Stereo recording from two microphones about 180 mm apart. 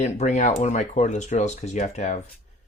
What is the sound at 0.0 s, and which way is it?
Speech, 40° left (ahead or behind).